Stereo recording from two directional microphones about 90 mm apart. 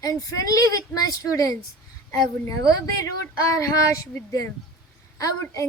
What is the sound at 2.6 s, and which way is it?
Speech, 40° left (ahead or behind).